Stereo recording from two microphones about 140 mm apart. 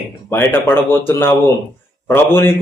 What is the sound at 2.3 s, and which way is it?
Speech, 15° left (ahead or behind).